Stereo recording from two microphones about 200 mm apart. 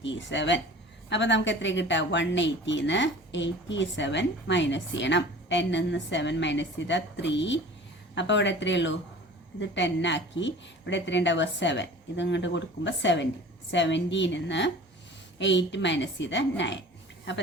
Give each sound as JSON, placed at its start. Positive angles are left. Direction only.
{"t": 0.0, "sound": "a woman's voice", "side_deg": 65}